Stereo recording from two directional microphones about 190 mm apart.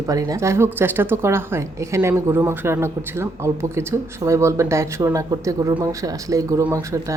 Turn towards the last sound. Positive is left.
turn(degrees=-15)  # may be behind; listen again after turning